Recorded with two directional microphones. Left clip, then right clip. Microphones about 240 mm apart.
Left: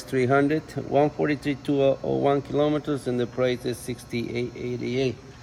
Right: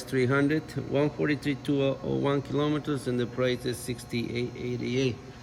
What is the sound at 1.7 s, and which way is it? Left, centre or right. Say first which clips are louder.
Speech: left 7 dB; right.